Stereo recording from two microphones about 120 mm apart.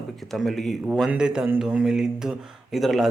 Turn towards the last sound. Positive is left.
turn(degrees=0)  # may be behind; listen again after turning